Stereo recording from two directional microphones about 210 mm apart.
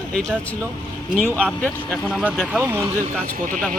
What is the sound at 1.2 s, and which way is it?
Speech, 5° left (ahead or behind).